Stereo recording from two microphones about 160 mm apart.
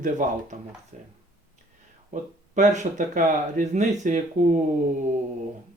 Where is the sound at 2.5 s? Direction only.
50° right (ahead or behind).